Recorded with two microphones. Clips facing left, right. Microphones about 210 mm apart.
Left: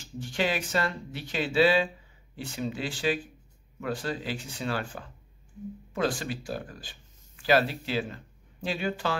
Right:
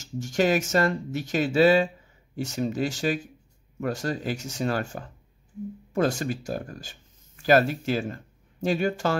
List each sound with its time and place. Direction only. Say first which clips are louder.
0.0 s speech: right 6 dB; 45° right (ahead or behind)